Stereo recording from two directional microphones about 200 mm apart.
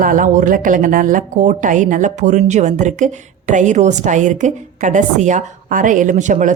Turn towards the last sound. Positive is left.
turn(degrees=-40)  # may be behind; listen again after turning